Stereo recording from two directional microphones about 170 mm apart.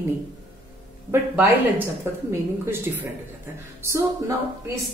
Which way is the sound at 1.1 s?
15° right (ahead or behind).